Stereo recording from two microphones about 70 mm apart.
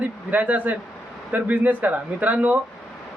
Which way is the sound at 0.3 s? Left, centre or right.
Right.